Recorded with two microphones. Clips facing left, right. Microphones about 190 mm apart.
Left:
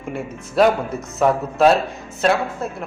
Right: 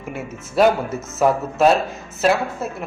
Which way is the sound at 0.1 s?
Centre (ahead or behind).